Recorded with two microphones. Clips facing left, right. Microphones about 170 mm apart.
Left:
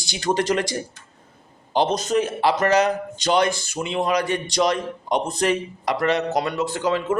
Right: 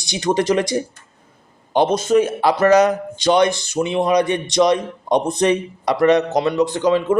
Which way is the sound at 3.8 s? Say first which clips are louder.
Right 11 dB; 15° right (ahead or behind).